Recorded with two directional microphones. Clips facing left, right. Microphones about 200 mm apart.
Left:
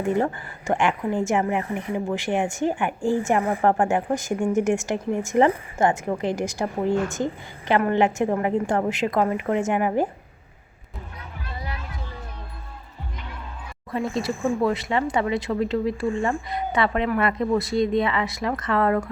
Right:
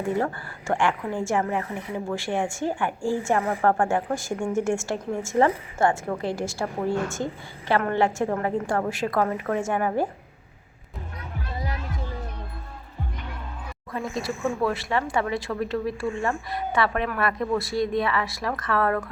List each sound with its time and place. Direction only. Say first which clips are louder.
0.1 s a woman's voice: left 3 dB; 20° left (ahead or behind)
11.5 s music: right 2 dB; 40° right (ahead or behind)
13.9 s speech: left 4 dB; 30° left (ahead or behind)